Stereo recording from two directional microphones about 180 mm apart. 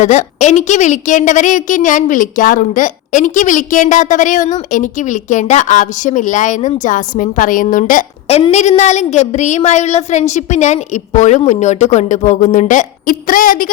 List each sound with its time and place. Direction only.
0.0 s a woman's voice: 40° left (ahead or behind)
8.3 s a woman's voice: 35° left (ahead or behind)